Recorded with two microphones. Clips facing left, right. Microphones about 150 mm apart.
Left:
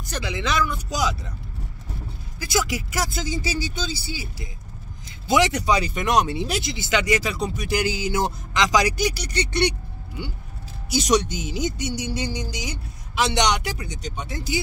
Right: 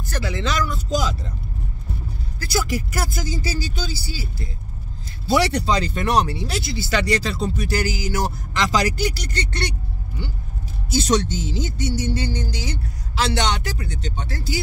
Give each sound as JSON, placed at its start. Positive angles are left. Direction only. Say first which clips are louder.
{"t": 0.0, "sound": "speech", "louder": "right 2 dB", "side_deg": 15}
{"t": 2.4, "sound": "speech", "louder": "right 1 dB", "side_deg": 15}